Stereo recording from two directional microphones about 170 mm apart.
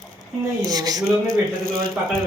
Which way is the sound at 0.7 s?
20° right (ahead or behind).